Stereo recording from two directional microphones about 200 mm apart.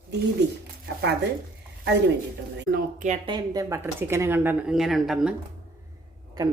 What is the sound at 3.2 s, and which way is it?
Speech, 20° right (ahead or behind).